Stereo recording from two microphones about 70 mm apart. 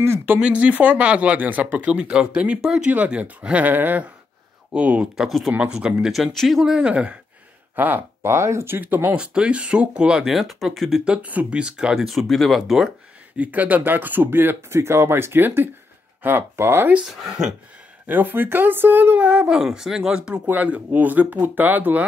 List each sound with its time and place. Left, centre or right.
0.0 s speech: right
0.4 s speech: centre
5.1 s speech: centre
7.7 s speech: right
9.1 s speech: centre
11.1 s speech: centre
13.4 s speech: right
17.2 s speech: centre
18.0 s speech: right